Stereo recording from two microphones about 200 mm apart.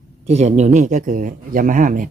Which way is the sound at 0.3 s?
35° right (ahead or behind).